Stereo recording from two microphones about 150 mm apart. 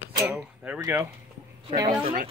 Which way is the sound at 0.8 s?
20° right (ahead or behind).